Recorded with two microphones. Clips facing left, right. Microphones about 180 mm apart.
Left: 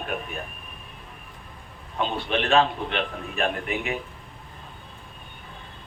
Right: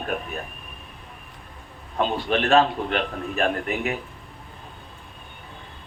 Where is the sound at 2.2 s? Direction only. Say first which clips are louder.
Right 2 dB; 40° right (ahead or behind).